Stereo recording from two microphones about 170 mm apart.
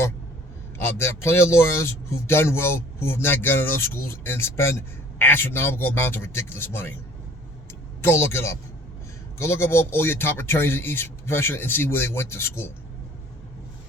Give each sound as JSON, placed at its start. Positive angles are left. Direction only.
{"t": 0.8, "sound": "speech", "side_deg": 15}
{"t": 8.0, "sound": "speech", "side_deg": 15}